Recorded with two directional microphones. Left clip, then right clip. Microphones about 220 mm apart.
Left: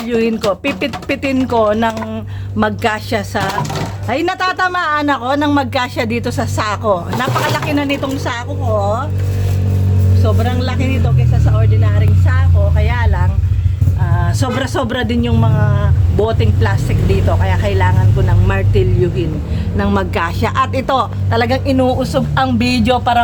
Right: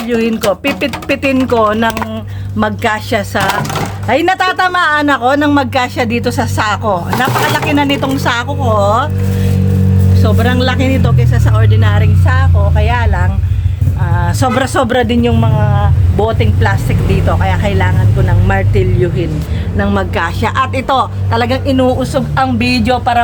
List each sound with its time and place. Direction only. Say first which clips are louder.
0.1 s a woman's voice: right 2 dB; centre (ahead or behind)
7.7 s speech: right 4 dB; 25° right (ahead or behind); by 9.0 s 45° right (ahead or behind)
10.2 s speech: right 6 dB; 45° right (ahead or behind)
12.8 s a man's voice: right 5 dB; 20° right (ahead or behind)
19.7 s a woman's voice: right 2 dB; 5° left (ahead or behind)